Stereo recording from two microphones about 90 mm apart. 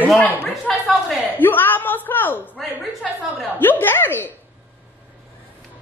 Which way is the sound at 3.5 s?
20° left (ahead or behind).